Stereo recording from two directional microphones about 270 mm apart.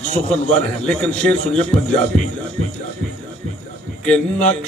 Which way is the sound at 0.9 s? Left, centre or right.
Centre.